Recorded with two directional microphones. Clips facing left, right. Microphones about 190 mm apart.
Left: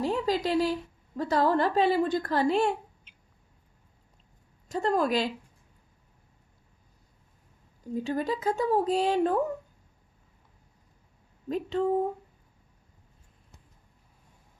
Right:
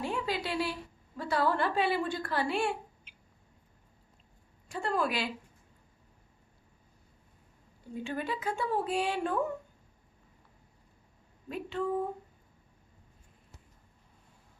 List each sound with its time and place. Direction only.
0.0 s a woman's voice: 40° left (ahead or behind)
4.7 s a woman's voice: 40° left (ahead or behind)
7.9 s a woman's voice: 40° left (ahead or behind)
11.4 s a woman's voice: 40° left (ahead or behind)